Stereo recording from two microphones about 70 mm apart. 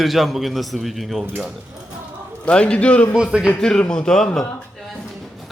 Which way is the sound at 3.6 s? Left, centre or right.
Centre.